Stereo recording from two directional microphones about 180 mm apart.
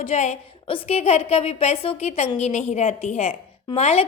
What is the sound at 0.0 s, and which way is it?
A woman's voice, 40° left (ahead or behind).